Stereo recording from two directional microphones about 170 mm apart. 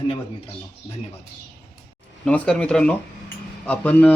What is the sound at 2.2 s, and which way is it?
Speech, 5° left (ahead or behind).